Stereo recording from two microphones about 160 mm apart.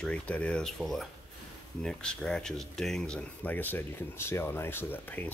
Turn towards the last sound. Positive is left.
turn(degrees=10)  # may be behind; listen again after turning